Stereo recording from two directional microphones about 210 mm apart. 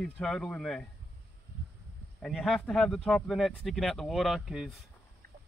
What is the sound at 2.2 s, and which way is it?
Speech, centre (ahead or behind).